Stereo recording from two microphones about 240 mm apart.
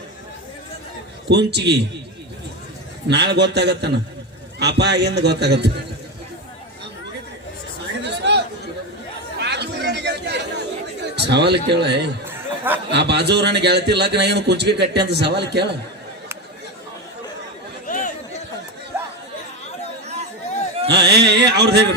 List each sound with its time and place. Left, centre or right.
1.3 s a man's voice: right
3.1 s a man's voice: right
8.0 s chatter: right
9.4 s chatter: right
11.1 s speech: right
12.2 s a sound: centre
12.9 s a man's voice: right
17.8 s chatter: left
18.9 s chatter: centre
20.8 s a man's voice: right